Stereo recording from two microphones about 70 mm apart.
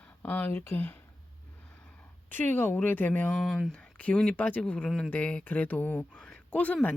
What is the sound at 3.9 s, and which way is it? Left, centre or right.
Speech, left.